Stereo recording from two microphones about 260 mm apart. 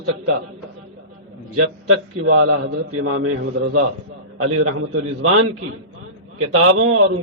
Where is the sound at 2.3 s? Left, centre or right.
Right.